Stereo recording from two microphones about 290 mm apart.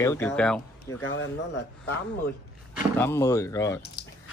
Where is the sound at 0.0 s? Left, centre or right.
Centre.